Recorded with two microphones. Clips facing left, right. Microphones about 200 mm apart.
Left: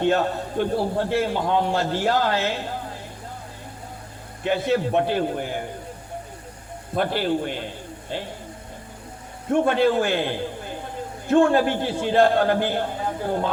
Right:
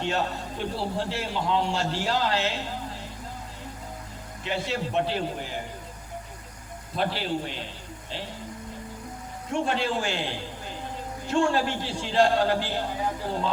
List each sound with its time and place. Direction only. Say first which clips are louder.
0.0 s a man's voice: left 7 dB; 55° left (ahead or behind)
4.4 s a man's voice: left 8 dB; 55° left (ahead or behind)
6.9 s a man's voice: left 5 dB; 50° left (ahead or behind)
9.5 s a man's voice: left 8 dB; 55° left (ahead or behind)